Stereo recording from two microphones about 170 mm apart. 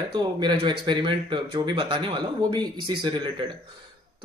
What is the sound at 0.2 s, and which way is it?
Speech, 25° right (ahead or behind).